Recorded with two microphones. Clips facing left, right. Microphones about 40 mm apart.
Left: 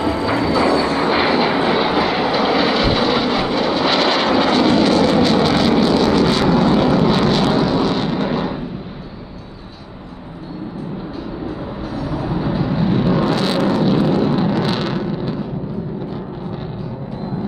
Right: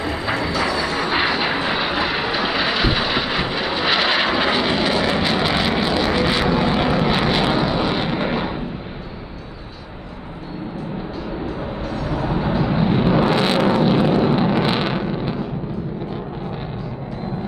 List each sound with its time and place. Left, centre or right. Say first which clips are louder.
0.0 s vehicle: left 5 dB; centre
12.0 s vehicle: left 1 dB; centre
12.3 s vehicle: even; centre